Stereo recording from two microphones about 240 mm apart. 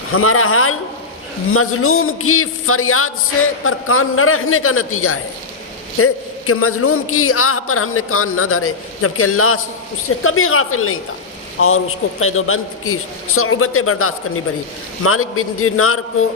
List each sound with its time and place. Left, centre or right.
0.1 s a man's voice: left
12.2 s a man's voice: left